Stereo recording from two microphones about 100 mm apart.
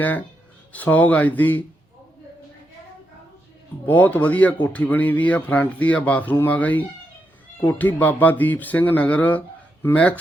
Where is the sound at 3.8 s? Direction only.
15° left (ahead or behind).